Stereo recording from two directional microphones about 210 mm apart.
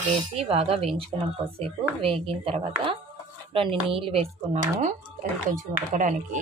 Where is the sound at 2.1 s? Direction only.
25° right (ahead or behind).